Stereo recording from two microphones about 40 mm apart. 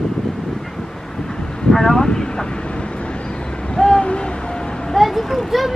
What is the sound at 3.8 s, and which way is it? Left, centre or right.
Hoot, centre.